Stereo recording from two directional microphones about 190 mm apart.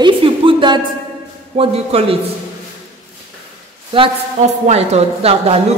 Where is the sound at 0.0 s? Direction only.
25° right (ahead or behind).